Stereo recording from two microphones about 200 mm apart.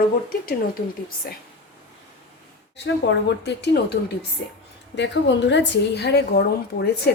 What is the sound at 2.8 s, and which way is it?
Speech, 60° left (ahead or behind).